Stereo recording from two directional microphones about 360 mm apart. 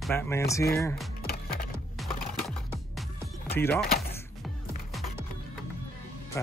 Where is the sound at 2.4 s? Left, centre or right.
Centre.